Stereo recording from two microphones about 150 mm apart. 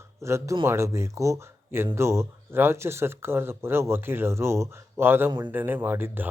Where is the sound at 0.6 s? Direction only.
15° right (ahead or behind).